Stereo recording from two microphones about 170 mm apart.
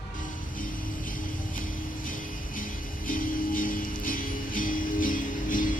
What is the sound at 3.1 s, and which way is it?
Music, 55° left (ahead or behind).